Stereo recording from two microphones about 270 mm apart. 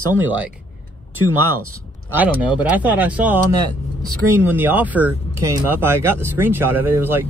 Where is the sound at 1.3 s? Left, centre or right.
Right.